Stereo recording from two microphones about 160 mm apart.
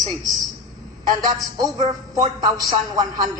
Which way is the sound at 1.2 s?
25° right (ahead or behind).